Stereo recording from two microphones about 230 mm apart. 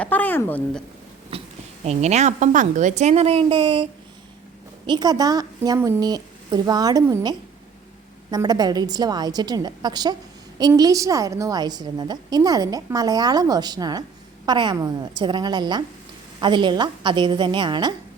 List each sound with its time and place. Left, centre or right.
0.0 s a woman's voice: centre
1.3 s a sound: right
1.8 s a woman's voice: right
4.9 s a woman's voice: centre